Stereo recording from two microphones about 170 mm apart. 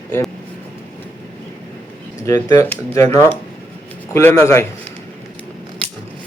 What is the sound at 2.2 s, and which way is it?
Speech, 20° left (ahead or behind).